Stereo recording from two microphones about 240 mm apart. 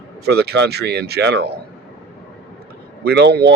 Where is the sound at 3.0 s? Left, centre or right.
Right.